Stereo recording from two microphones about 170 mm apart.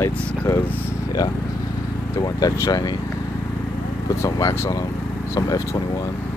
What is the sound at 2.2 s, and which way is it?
Speech, 20° left (ahead or behind).